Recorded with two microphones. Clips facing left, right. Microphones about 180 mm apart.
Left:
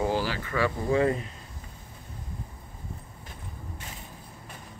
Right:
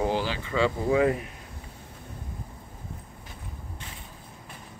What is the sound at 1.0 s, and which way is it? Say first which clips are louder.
Speech: right 1 dB; 10° right (ahead or behind).